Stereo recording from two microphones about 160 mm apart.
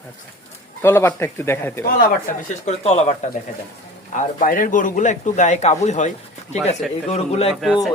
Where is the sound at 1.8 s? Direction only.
60° left (ahead or behind); by 3.2 s 45° left (ahead or behind).